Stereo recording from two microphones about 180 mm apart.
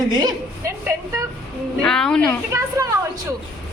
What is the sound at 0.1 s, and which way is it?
A woman's voice, 20° right (ahead or behind).